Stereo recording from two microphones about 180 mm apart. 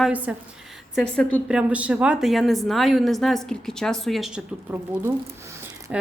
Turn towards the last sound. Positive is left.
turn(degrees=-5)  # may be behind; listen again after turning